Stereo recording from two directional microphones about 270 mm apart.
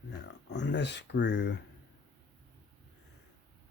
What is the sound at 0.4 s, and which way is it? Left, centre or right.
Speech, left.